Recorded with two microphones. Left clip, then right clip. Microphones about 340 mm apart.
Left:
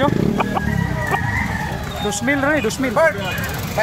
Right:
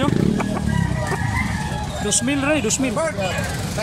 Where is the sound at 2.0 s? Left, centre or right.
Centre.